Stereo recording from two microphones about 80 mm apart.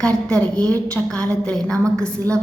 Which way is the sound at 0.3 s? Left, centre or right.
Centre.